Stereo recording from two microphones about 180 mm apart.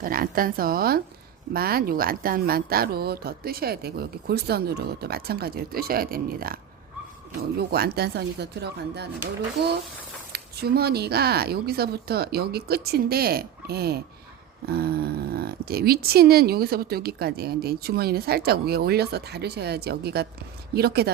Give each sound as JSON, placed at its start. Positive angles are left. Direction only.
{"t": 0.0, "sound": "a woman's voice", "side_deg": -50}
{"t": 7.7, "sound": "speech", "side_deg": -60}